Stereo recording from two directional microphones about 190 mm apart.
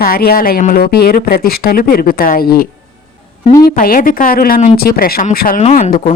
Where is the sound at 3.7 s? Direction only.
50° left (ahead or behind).